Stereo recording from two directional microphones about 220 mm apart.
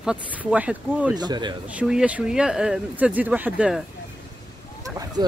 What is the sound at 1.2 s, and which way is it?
Speech, 20° right (ahead or behind).